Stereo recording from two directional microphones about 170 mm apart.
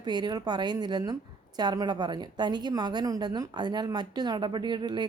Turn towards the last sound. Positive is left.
turn(degrees=-25)  # may be behind; listen again after turning